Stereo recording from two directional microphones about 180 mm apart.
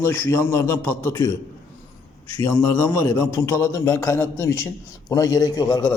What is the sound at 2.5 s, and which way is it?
Speech, 5° left (ahead or behind).